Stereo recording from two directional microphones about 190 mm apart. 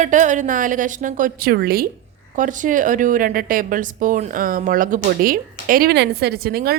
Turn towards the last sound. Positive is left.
turn(degrees=-55)  # may be behind; listen again after turning